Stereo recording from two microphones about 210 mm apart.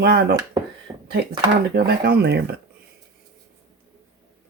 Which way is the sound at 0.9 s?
20° right (ahead or behind).